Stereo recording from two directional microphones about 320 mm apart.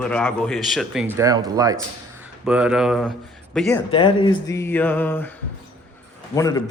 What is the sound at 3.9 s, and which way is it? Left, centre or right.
Speech, centre.